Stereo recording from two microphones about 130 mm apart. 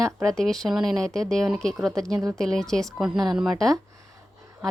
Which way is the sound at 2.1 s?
25° right (ahead or behind).